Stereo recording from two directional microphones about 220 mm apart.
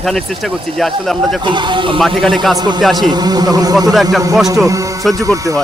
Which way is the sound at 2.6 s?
20° right (ahead or behind).